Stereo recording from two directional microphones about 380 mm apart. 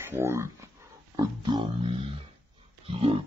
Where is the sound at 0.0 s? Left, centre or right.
Centre.